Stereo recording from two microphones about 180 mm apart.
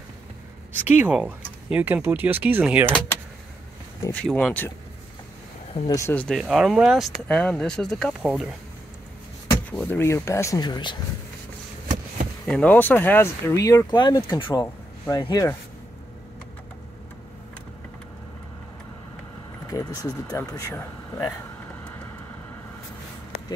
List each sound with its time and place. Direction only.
0.8 s speech: 10° right (ahead or behind)
4.0 s speech: 5° left (ahead or behind)
5.9 s speech: 15° left (ahead or behind)
6.2 s speech: centre (ahead or behind)
9.7 s speech: 10° left (ahead or behind); by 11.0 s 25° left (ahead or behind)
12.4 s speech: 5° left (ahead or behind)
19.7 s speech: 20° left (ahead or behind)